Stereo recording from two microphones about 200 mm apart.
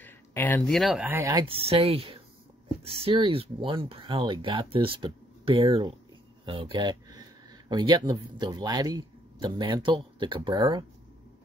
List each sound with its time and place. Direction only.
0.0 s speech: 10° left (ahead or behind); by 10.9 s 20° right (ahead or behind)